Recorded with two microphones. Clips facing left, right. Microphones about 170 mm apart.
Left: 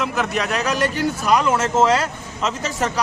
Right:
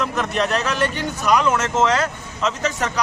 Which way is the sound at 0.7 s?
40° left (ahead or behind).